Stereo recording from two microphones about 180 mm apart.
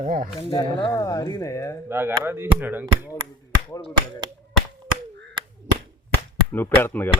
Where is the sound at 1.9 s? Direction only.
10° right (ahead or behind).